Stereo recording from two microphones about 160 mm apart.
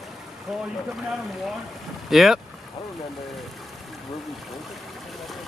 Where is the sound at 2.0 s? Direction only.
Centre (ahead or behind).